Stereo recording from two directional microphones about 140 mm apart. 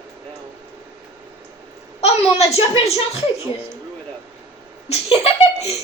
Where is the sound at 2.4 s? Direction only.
45° left (ahead or behind).